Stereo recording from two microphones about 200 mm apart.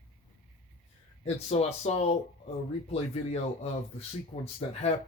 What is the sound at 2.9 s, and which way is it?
Speech, 30° left (ahead or behind).